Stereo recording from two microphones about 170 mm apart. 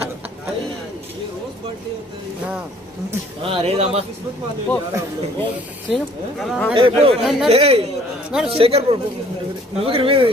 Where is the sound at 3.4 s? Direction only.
35° right (ahead or behind).